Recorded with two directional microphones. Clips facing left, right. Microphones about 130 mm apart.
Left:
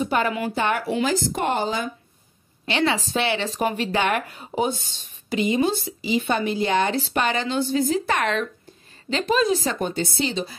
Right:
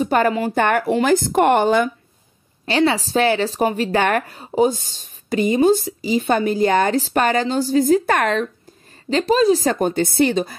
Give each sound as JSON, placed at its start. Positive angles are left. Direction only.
{"t": 0.0, "sound": "a woman's voice", "side_deg": -40}
{"t": 0.6, "sound": "speech", "side_deg": -50}
{"t": 2.6, "sound": "a woman's voice", "side_deg": -35}